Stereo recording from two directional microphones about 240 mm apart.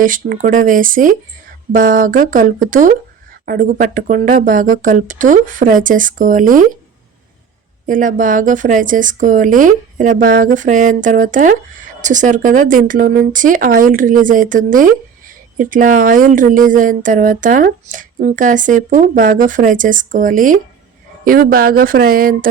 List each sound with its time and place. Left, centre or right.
0.0 s a woman's voice: right
7.9 s a woman's voice: right